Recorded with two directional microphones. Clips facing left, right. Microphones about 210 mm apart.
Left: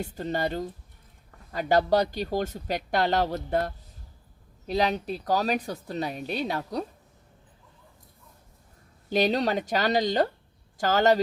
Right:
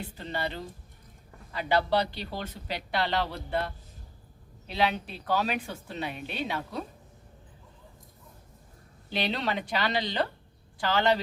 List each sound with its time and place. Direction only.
0.0 s a woman's voice: 45° left (ahead or behind)
9.0 s speech: 45° left (ahead or behind)